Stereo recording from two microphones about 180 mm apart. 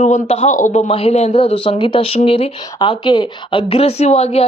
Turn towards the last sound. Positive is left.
turn(degrees=35)  # may be behind; listen again after turning